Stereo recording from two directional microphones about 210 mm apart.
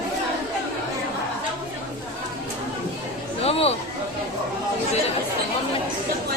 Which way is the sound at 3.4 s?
30° left (ahead or behind).